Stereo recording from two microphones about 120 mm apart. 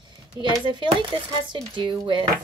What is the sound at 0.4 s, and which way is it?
A woman's voice, 40° right (ahead or behind).